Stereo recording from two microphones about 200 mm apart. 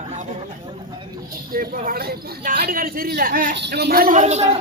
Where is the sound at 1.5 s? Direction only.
45° right (ahead or behind).